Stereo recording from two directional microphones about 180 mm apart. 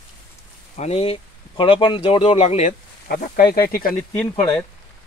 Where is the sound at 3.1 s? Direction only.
60° left (ahead or behind).